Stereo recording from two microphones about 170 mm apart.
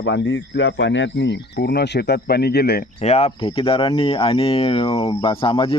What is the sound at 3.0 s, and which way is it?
Speech, 40° left (ahead or behind).